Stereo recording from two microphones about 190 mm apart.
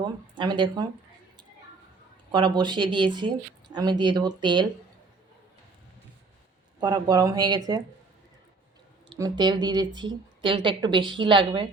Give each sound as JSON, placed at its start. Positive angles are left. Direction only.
{"t": 0.0, "sound": "speech", "side_deg": -25}
{"t": 2.3, "sound": "speech", "side_deg": -25}
{"t": 6.7, "sound": "speech", "side_deg": -20}
{"t": 9.0, "sound": "speech", "side_deg": -20}